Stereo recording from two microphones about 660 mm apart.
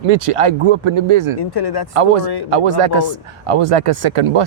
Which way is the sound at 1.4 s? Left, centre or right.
Left.